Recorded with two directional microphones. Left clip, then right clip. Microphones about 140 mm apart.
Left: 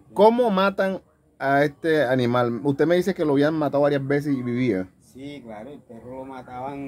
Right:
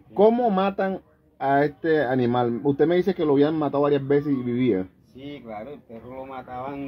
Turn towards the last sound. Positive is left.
turn(degrees=0)  # may be behind; listen again after turning